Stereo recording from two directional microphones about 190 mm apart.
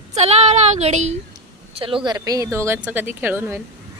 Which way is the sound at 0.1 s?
35° right (ahead or behind).